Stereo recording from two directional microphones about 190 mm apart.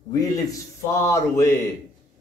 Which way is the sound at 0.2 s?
15° left (ahead or behind).